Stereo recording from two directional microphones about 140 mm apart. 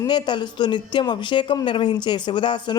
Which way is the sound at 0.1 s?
35° left (ahead or behind).